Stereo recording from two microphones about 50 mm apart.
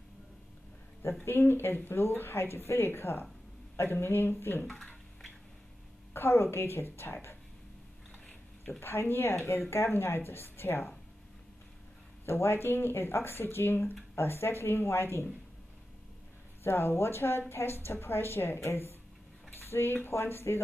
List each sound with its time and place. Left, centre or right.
1.2 s speech: left
4.6 s a sound: centre
6.1 s speech: left
8.7 s speech: left
12.3 s speech: left
16.6 s speech: left